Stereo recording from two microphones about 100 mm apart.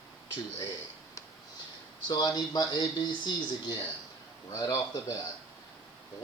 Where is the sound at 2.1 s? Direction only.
40° left (ahead or behind).